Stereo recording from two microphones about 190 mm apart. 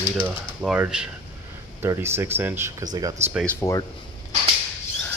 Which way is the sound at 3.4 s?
15° left (ahead or behind).